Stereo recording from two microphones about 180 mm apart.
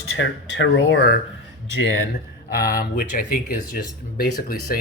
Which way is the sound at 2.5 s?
55° left (ahead or behind).